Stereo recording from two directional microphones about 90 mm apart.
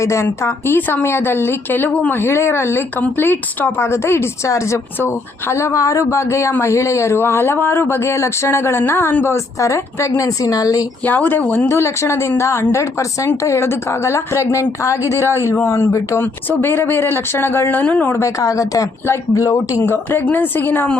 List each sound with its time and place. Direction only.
0.0 s speech: 30° left (ahead or behind)
11.0 s speech: 20° left (ahead or behind)
11.7 s speech: 30° left (ahead or behind)
18.1 s speech: 35° left (ahead or behind)
19.8 s speech: 25° left (ahead or behind)